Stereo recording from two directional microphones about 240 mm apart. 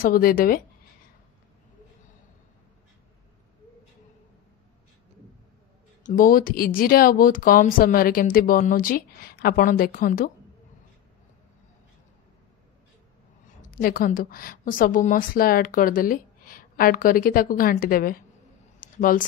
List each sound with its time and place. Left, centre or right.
0.0 s a woman's voice: left
6.0 s a woman's voice: left
13.6 s a woman's voice: left
18.8 s a sound: left